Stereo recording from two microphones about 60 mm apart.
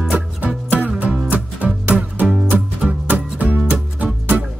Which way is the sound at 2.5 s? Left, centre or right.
Right.